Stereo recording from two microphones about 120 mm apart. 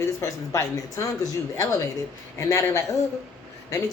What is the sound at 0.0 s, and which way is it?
Speech, 20° left (ahead or behind).